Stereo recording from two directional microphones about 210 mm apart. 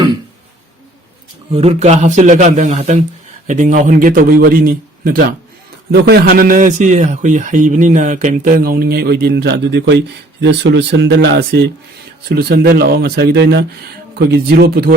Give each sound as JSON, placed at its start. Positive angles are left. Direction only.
{"t": 1.5, "sound": "a man's voice", "side_deg": -30}